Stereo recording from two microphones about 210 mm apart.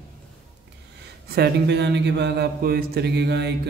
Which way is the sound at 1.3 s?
50° right (ahead or behind).